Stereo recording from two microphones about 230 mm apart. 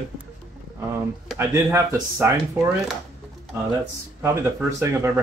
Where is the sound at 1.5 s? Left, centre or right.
Centre.